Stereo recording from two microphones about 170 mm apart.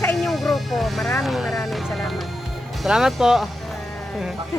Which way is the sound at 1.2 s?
Centre (ahead or behind).